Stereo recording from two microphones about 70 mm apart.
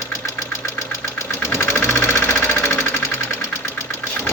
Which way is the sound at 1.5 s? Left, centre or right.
Left.